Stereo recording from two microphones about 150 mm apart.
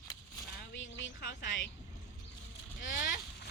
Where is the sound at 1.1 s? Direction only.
70° left (ahead or behind).